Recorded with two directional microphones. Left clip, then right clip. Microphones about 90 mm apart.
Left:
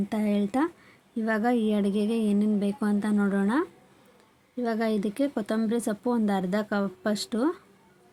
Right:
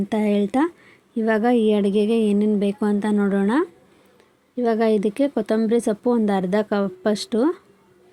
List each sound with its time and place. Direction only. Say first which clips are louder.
0.1 s speech: right 8 dB; 25° right (ahead or behind)